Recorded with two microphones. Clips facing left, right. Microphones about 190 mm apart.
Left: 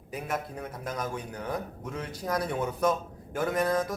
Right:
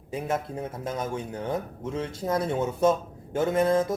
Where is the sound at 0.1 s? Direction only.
25° right (ahead or behind).